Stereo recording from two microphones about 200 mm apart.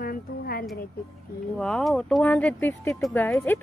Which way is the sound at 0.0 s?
45° left (ahead or behind).